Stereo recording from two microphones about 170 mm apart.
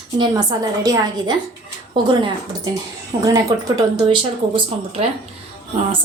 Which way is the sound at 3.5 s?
25° right (ahead or behind).